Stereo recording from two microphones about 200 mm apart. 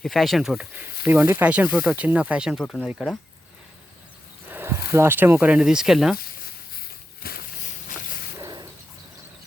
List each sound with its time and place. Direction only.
0.0 s speech: centre (ahead or behind)
4.5 s speech: 15° right (ahead or behind)
6.1 s walk: 50° left (ahead or behind)
8.4 s bird: 20° right (ahead or behind)